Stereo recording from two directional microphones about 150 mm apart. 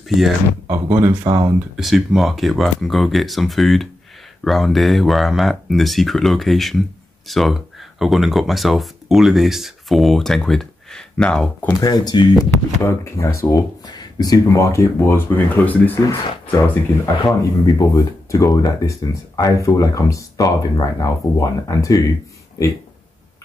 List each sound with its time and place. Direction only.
0.7 s speech: 20° right (ahead or behind)
1.8 s speech: centre (ahead or behind)
11.8 s speech: 30° left (ahead or behind)